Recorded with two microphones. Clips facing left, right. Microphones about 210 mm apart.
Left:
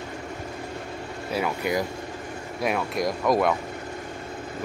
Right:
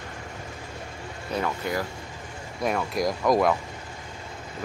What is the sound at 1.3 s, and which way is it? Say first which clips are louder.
Speech: left 2 dB; 10° left (ahead or behind).